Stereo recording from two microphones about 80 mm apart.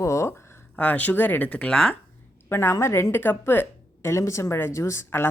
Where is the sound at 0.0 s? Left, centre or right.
Left.